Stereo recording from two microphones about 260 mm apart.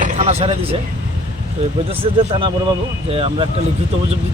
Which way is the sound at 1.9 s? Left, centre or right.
Right.